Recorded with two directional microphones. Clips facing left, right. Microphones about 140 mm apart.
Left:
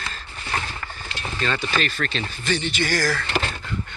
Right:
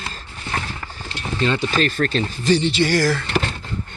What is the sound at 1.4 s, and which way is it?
Speech, 20° right (ahead or behind).